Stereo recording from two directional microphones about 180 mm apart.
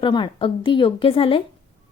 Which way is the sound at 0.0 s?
25° left (ahead or behind).